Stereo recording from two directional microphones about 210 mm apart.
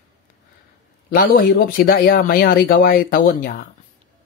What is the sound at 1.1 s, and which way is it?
Speech, 45° left (ahead or behind).